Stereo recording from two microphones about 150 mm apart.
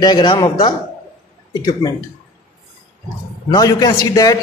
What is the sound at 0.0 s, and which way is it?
A man's voice, 30° left (ahead or behind).